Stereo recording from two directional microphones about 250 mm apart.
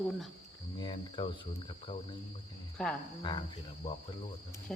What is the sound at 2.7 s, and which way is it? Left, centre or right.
Cricket, centre.